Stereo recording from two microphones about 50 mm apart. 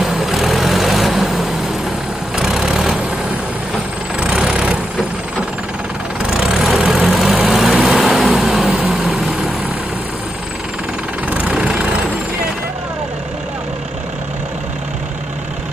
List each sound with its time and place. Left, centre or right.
0.0 s vehicle: centre
4.4 s vehicle: centre
6.3 s vehicle: centre
11.2 s vehicle: right